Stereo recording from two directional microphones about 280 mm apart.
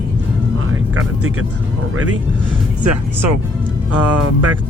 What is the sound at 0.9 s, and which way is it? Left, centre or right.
Speech, right.